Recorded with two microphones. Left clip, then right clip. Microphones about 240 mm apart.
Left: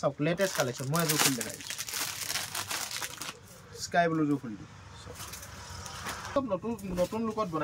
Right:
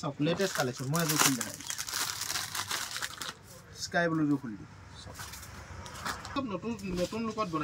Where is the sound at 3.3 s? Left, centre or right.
Centre.